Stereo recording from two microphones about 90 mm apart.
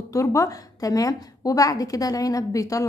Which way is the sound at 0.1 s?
35° left (ahead or behind).